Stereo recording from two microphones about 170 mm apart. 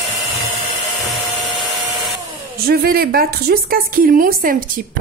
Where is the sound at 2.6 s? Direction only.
60° right (ahead or behind).